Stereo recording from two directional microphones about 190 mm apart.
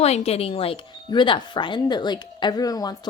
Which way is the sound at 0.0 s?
35° left (ahead or behind).